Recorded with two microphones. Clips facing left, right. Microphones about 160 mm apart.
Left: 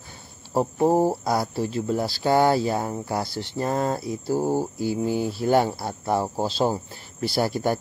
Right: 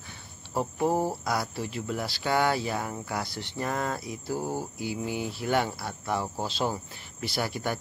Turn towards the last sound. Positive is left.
turn(degrees=35)  # may be behind; listen again after turning